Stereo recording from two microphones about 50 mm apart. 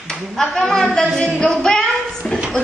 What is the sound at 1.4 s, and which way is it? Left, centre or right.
Speech, centre.